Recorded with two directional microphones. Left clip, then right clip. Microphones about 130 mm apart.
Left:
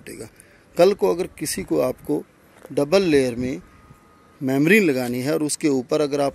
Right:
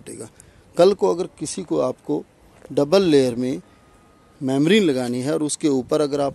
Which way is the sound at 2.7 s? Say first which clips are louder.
Right 2 dB; 25° right (ahead or behind).